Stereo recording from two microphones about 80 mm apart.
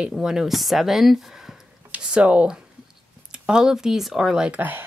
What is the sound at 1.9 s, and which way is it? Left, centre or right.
Speech, centre.